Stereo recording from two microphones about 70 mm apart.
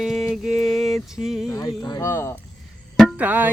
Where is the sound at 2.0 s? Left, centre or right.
Left.